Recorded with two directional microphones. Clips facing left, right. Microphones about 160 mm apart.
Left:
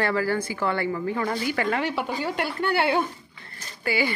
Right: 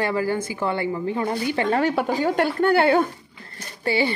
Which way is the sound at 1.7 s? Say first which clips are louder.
Right 6 dB; 45° right (ahead or behind).